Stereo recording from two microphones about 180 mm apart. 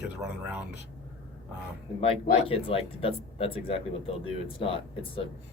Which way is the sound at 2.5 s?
30° left (ahead or behind).